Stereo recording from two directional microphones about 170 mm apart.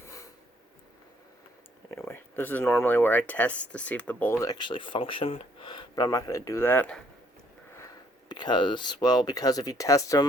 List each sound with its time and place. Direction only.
0.0 s a sound: 20° left (ahead or behind)
2.0 s speech: 15° left (ahead or behind)
8.3 s speech: 25° left (ahead or behind)